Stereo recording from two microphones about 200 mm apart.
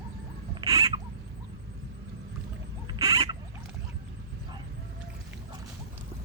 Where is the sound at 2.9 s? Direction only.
20° right (ahead or behind).